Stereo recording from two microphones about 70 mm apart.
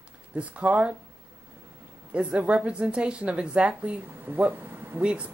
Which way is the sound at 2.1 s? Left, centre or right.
Centre.